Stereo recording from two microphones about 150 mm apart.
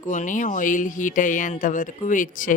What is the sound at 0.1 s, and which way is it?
Speech, 60° left (ahead or behind).